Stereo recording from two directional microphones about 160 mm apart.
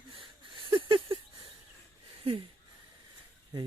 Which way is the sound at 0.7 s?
35° right (ahead or behind).